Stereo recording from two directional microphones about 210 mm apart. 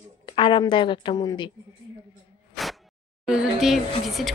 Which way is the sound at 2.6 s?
Centre (ahead or behind).